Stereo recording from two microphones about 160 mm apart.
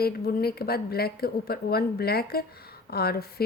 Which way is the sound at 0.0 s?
75° left (ahead or behind).